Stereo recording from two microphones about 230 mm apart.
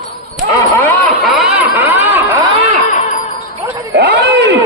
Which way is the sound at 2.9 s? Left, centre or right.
Left.